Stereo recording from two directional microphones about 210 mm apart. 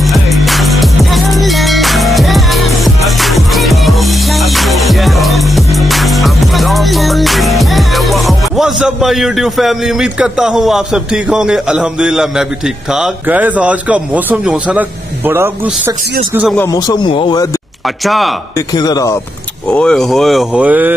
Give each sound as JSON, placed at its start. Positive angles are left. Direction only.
{"t": 0.0, "sound": "music", "side_deg": 0}
{"t": 16.5, "sound": "speech", "side_deg": 15}
{"t": 18.0, "sound": "speech", "side_deg": 0}
{"t": 18.7, "sound": "speech", "side_deg": 20}
{"t": 19.7, "sound": "speech", "side_deg": 5}